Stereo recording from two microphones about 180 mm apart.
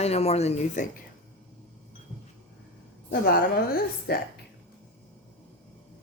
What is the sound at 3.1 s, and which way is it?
A woman's voice, 55° left (ahead or behind).